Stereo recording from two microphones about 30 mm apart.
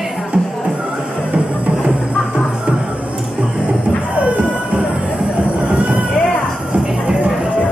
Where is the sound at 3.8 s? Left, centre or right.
Right.